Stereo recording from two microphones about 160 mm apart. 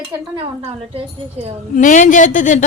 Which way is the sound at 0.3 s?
35° right (ahead or behind).